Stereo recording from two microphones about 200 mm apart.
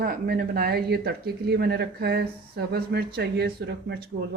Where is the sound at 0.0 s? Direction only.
50° right (ahead or behind).